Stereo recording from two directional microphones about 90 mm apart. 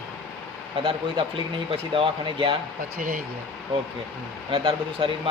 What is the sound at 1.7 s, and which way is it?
Speech, 85° right.